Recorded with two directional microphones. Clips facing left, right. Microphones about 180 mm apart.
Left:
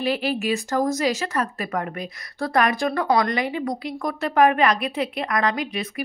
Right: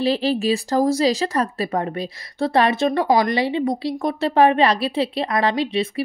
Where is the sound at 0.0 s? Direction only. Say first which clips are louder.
Right 4 dB; 35° right (ahead or behind).